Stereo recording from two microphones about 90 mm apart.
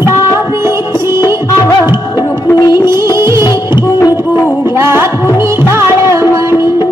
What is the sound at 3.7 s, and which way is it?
Music, 45° left (ahead or behind).